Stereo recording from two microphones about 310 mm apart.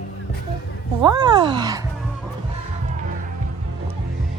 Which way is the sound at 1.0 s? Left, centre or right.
Centre.